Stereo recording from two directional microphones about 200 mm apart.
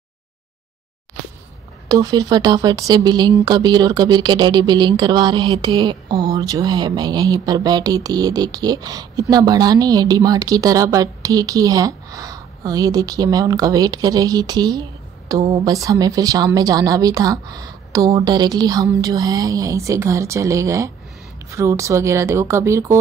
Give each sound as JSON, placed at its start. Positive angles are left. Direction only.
{"t": 1.9, "sound": "a woman's voice", "side_deg": -15}